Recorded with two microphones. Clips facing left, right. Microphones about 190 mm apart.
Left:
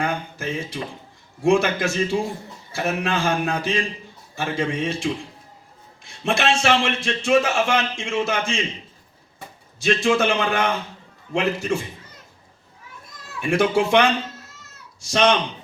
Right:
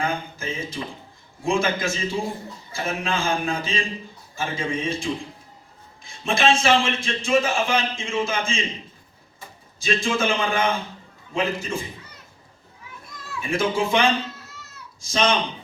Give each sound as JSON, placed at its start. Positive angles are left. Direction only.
{"t": 0.0, "sound": "a man's voice", "side_deg": 65}
{"t": 9.8, "sound": "a man's voice", "side_deg": 70}
{"t": 13.4, "sound": "a man's voice", "side_deg": 70}